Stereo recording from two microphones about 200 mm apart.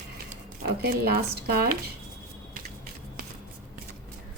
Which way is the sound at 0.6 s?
50° right (ahead or behind).